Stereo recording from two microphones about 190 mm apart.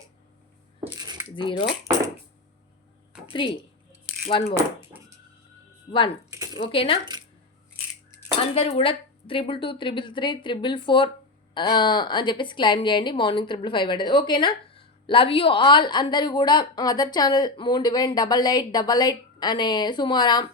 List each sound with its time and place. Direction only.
0.9 s cutlery: 20° right (ahead or behind)
1.4 s a woman's voice: 25° left (ahead or behind)
3.2 s a woman's voice: 25° left (ahead or behind)
6.3 s a sound: 20° right (ahead or behind)
6.6 s a woman's voice: 30° left (ahead or behind)
8.5 s a woman's voice: 30° left (ahead or behind)